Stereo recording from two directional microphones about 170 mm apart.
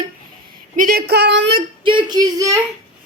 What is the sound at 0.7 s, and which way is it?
Speech, 60° right (ahead or behind).